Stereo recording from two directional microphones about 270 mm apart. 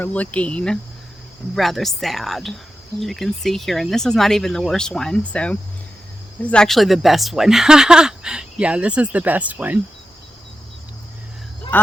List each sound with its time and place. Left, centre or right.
0.0 s speech: centre
11.7 s speech: centre